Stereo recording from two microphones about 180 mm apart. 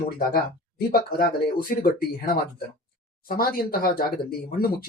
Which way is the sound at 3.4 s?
55° left (ahead or behind).